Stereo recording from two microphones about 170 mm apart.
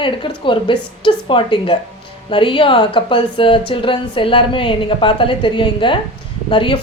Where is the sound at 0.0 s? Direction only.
30° left (ahead or behind).